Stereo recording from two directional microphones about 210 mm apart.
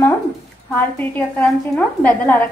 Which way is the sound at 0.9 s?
10° left (ahead or behind).